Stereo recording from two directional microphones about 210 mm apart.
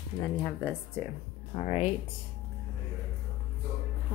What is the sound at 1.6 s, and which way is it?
Speech, 30° left (ahead or behind).